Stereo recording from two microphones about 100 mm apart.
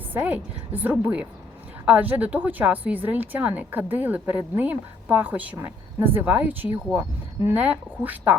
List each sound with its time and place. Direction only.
0.1 s a woman's voice: 15° right (ahead or behind)